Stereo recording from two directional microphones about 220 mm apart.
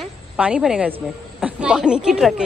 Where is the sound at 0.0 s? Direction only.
5° right (ahead or behind).